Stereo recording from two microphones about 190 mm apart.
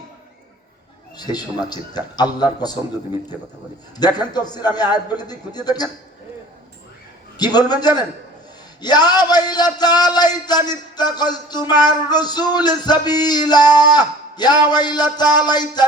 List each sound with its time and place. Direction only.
1.1 s music: 20° left (ahead or behind)
3.9 s music: 20° left (ahead or behind)
7.3 s music: 20° left (ahead or behind)
13.7 s a man's voice: 20° left (ahead or behind)
14.7 s music: 20° left (ahead or behind)